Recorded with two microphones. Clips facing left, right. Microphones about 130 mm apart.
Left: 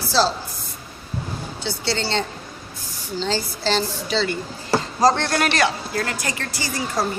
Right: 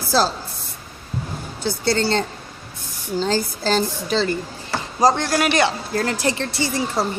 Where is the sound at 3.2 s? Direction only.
45° right (ahead or behind).